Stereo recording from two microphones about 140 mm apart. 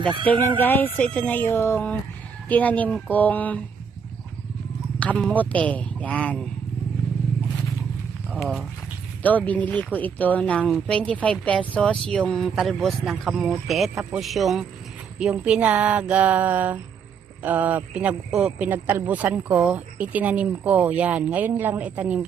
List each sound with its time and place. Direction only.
0.0 s speech: 35° right (ahead or behind)
0.6 s speech: 15° left (ahead or behind)
4.9 s a sound: 10° left (ahead or behind)
5.3 s speech: 10° left (ahead or behind)
8.3 s a man's voice: centre (ahead or behind)